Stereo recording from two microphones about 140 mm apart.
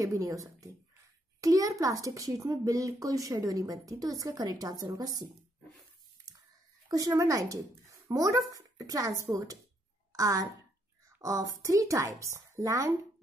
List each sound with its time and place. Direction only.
0.0 s a child's voice: 20° right (ahead or behind)
6.9 s a child's voice: 25° right (ahead or behind)